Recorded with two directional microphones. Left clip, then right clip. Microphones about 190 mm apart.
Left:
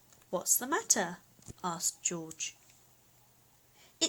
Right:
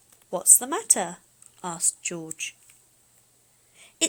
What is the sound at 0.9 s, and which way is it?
Speech, 10° right (ahead or behind).